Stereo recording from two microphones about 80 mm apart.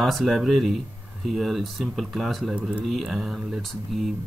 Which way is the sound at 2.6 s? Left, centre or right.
Centre.